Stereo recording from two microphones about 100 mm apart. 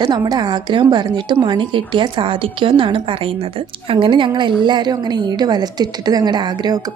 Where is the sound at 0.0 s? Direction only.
45° right (ahead or behind); by 3.9 s 65° right (ahead or behind).